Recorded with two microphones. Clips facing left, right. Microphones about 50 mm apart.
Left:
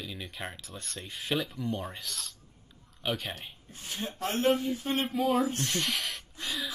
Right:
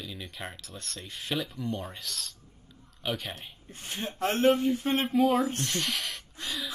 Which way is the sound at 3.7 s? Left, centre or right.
Right.